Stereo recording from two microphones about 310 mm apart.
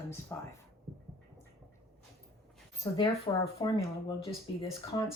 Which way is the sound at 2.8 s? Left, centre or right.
Centre.